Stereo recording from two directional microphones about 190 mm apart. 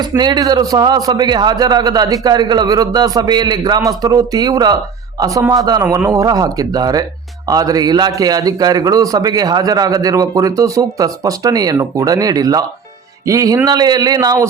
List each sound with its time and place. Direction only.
0.0 s a man's voice: 20° right (ahead or behind)